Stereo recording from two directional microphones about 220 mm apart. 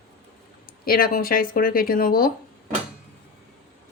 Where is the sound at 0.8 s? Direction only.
40° left (ahead or behind).